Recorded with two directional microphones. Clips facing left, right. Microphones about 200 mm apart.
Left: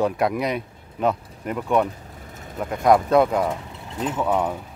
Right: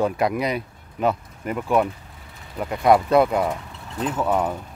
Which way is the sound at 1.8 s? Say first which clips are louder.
Even; 45° left (ahead or behind).